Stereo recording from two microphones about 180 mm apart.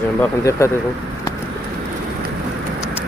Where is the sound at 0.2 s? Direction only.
15° left (ahead or behind).